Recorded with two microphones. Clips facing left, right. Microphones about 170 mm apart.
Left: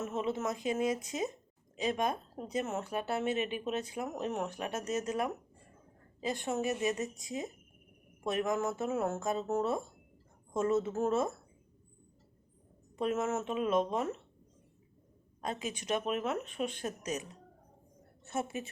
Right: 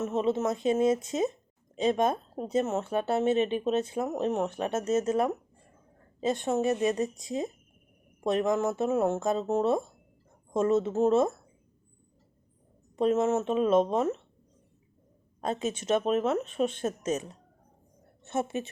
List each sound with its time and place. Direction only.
0.0 s speech: 20° right (ahead or behind)
13.0 s speech: 25° right (ahead or behind)
15.4 s speech: 25° right (ahead or behind)
18.3 s speech: 25° right (ahead or behind)